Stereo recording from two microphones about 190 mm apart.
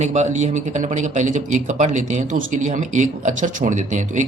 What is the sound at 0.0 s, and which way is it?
A man's voice, 40° right (ahead or behind).